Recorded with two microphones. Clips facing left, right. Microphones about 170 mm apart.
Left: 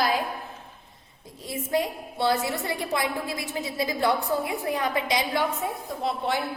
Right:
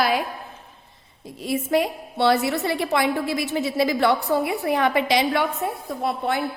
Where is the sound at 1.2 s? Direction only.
75° right (ahead or behind).